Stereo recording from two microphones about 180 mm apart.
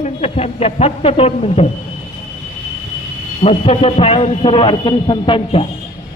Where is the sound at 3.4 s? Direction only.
35° left (ahead or behind).